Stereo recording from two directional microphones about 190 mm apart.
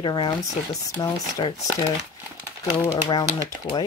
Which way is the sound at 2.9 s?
25° left (ahead or behind).